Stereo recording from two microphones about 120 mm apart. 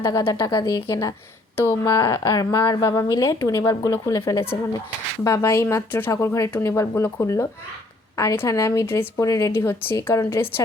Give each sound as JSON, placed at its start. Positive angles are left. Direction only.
{"t": 0.0, "sound": "speech", "side_deg": 25}